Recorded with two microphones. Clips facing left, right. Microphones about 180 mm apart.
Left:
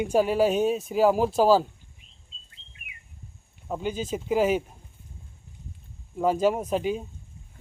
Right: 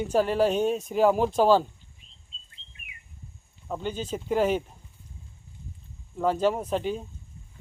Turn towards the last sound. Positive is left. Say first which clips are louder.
# left 2 dB
turn(degrees=10)  # may be behind; listen again after turning